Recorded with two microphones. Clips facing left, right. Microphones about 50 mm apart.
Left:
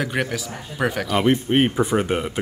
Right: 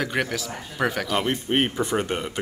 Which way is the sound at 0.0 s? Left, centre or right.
Centre.